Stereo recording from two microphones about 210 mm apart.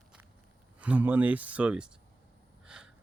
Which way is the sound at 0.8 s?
5° right (ahead or behind).